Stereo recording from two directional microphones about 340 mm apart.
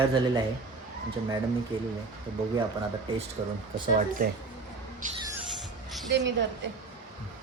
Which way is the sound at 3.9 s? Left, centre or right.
Right.